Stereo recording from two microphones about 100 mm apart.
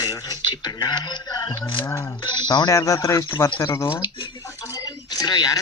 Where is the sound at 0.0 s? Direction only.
35° left (ahead or behind).